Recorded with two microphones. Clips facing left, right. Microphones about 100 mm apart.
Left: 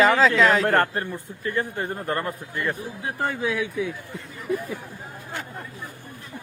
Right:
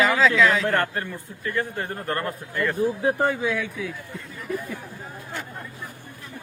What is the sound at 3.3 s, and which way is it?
Speech, centre (ahead or behind).